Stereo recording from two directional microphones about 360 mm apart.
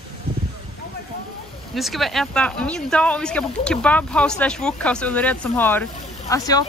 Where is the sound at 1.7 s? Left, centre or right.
Centre.